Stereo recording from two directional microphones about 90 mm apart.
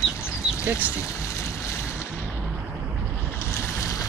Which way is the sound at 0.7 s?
15° right (ahead or behind).